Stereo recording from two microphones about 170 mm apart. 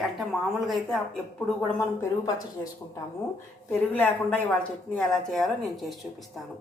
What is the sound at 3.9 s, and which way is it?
Speech, 10° left (ahead or behind).